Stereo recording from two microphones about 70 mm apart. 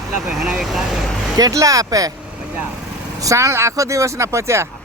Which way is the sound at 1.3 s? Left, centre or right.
Right.